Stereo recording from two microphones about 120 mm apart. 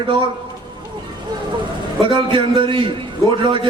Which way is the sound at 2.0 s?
45° right (ahead or behind).